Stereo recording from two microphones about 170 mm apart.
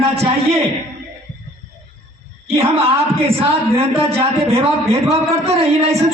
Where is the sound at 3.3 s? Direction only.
35° right (ahead or behind).